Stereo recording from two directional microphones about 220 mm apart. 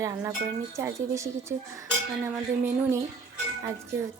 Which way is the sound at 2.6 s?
10° right (ahead or behind).